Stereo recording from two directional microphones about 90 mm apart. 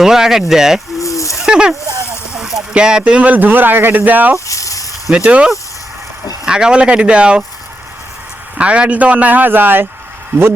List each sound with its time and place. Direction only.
0.0 s speech: 5° right (ahead or behind)
0.9 s snake: 35° left (ahead or behind)
1.3 s speech: 5° right (ahead or behind)
4.4 s a sound: 35° left (ahead or behind)
5.1 s a man's voice: 10° right (ahead or behind)
8.5 s a man's voice: 15° right (ahead or behind)